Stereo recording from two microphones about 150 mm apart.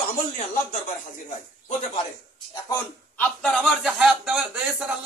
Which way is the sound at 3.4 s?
Centre (ahead or behind).